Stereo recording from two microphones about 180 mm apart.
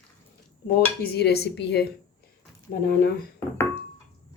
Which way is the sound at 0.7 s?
65° left (ahead or behind).